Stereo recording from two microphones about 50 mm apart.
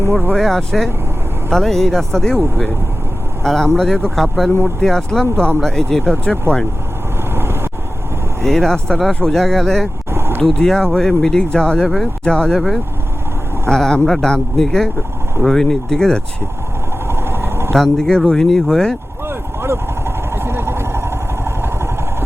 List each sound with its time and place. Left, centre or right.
0.3 s speech: centre
3.4 s speech: centre
7.3 s vehicle: right
8.4 s speech: centre
10.1 s a sound: right
10.4 s speech: centre
12.5 s speech: centre
17.1 s vehicle: right
17.7 s speech: centre
19.3 s vehicle: right